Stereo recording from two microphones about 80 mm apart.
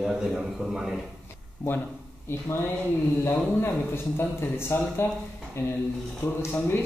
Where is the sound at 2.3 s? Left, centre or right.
Left.